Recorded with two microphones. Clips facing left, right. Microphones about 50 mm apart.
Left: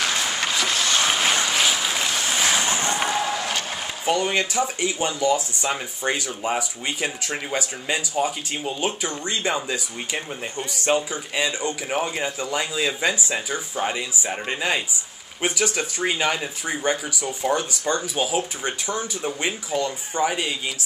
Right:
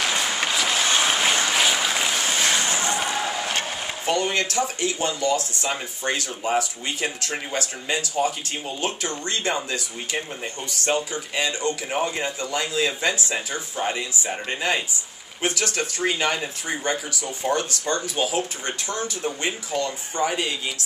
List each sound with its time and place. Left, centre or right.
0.0 s boat: centre
2.7 s a sound: left
4.0 s speech: centre